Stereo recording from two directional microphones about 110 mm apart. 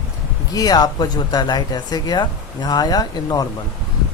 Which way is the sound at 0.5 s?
35° left (ahead or behind).